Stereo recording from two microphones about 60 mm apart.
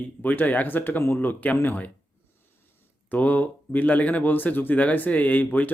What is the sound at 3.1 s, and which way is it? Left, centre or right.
A man's voice, left.